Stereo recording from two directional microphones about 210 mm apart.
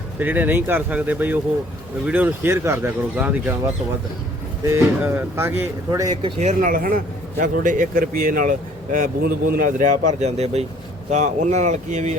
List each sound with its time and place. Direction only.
0.2 s speech: 10° right (ahead or behind)
6.4 s a man's voice: 40° right (ahead or behind)